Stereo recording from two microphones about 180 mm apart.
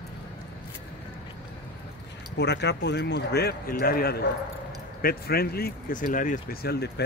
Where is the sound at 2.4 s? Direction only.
70° left (ahead or behind).